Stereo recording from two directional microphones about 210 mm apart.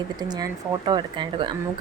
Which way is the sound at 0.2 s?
20° right (ahead or behind).